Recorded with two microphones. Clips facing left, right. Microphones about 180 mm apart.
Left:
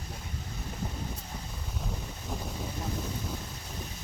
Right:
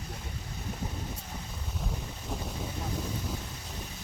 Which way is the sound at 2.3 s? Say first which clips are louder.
Even; centre (ahead or behind).